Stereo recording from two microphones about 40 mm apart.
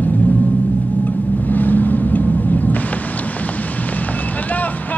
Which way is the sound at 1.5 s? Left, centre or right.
Left.